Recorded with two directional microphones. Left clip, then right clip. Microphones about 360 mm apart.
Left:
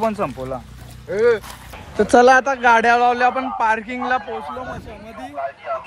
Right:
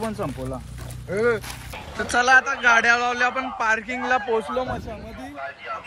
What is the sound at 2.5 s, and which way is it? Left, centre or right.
Speech, centre.